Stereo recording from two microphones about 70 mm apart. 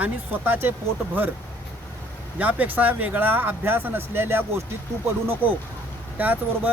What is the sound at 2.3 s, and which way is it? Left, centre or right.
Speech, right.